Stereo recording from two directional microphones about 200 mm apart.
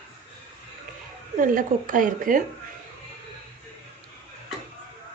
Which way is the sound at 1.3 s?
40° right (ahead or behind).